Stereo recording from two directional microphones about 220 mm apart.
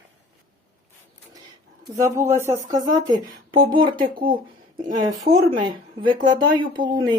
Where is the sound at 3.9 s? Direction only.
40° right (ahead or behind).